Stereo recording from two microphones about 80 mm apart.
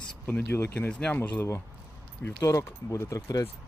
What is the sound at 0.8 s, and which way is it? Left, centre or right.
Speech, centre.